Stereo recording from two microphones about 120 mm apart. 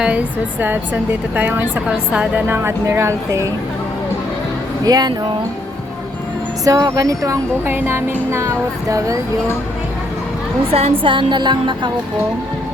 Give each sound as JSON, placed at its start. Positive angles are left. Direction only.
{"t": 0.0, "sound": "a woman's voice", "side_deg": -10}
{"t": 4.9, "sound": "music", "side_deg": -35}
{"t": 6.7, "sound": "speech", "side_deg": -30}
{"t": 10.7, "sound": "a woman's voice", "side_deg": -55}
{"t": 11.0, "sound": "music", "side_deg": -40}